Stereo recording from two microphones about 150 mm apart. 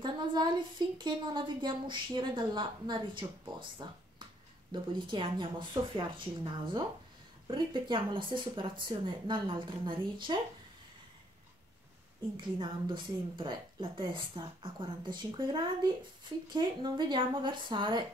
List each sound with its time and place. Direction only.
0.0 s a woman's voice: 30° right (ahead or behind)
12.4 s a woman's voice: 30° right (ahead or behind)